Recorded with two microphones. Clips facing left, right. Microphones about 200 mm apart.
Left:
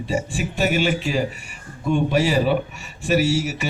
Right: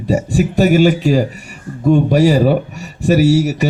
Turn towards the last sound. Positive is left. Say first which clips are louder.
# right 9 dB
turn(degrees=-40)  # may be behind; listen again after turning